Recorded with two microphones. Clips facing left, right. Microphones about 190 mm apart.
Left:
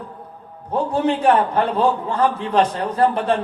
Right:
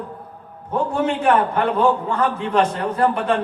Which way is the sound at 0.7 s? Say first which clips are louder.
Left 1 dB; 35° left (ahead or behind).